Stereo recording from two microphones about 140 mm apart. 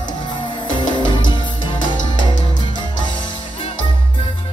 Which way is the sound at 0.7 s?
35° left (ahead or behind).